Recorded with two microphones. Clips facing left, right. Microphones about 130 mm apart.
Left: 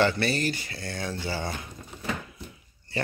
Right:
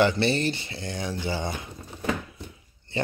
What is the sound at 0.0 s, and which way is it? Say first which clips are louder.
Speech: right 2 dB; 20° right (ahead or behind).